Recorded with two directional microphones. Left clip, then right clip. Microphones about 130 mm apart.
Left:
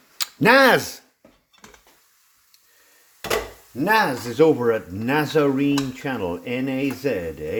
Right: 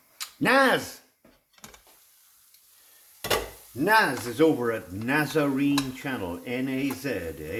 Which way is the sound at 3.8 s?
45° left (ahead or behind).